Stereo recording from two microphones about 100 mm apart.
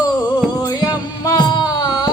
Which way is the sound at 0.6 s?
45° left (ahead or behind).